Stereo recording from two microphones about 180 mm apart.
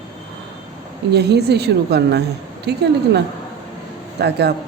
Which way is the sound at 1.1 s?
65° right (ahead or behind).